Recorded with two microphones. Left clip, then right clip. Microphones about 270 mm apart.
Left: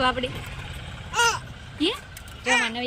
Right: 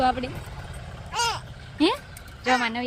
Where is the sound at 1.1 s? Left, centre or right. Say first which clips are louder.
Left 4 dB; right.